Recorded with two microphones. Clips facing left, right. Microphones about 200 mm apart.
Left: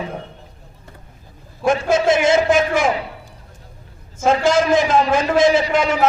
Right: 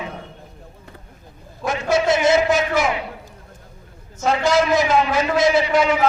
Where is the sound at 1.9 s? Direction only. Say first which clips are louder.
Even; 50° left (ahead or behind).